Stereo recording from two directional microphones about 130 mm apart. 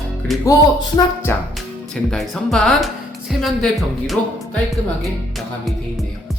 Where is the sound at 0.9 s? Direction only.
20° left (ahead or behind).